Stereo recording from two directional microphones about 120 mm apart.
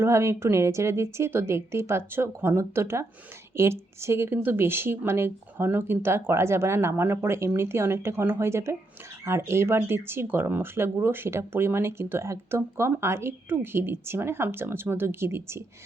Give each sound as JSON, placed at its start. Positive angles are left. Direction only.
{"t": 0.0, "sound": "speech", "side_deg": -25}